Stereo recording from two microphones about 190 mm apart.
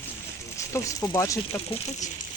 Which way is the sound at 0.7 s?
15° left (ahead or behind).